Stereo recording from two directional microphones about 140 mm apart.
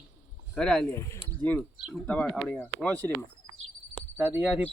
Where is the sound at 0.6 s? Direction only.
5° left (ahead or behind).